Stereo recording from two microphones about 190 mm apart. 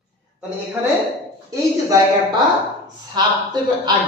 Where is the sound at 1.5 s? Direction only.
20° right (ahead or behind).